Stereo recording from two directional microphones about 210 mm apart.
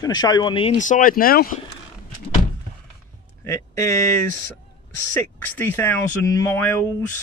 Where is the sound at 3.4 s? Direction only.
15° left (ahead or behind).